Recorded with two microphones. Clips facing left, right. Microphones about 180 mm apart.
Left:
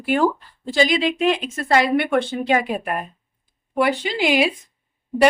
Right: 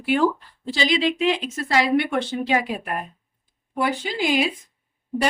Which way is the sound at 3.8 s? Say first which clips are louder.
Left 4 dB; 75° left (ahead or behind).